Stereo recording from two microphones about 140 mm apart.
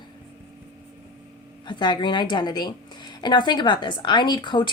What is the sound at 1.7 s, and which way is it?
A woman's voice, 35° left (ahead or behind).